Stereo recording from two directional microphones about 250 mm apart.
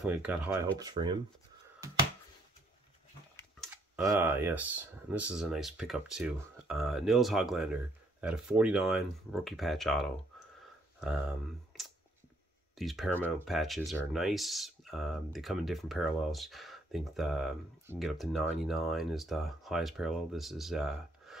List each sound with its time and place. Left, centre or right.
0.0 s speech: centre
3.9 s speech: centre